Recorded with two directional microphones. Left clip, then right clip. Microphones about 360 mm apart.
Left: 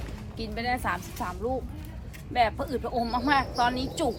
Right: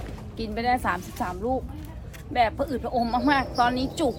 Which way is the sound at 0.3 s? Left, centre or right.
Centre.